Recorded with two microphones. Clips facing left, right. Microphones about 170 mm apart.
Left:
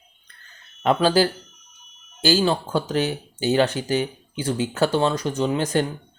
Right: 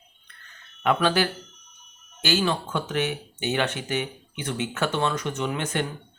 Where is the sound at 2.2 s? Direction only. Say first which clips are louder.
Left 5 dB; 30° left (ahead or behind).